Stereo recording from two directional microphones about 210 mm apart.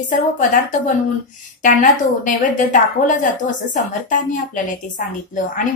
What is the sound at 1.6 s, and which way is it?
A woman's voice, 35° left (ahead or behind).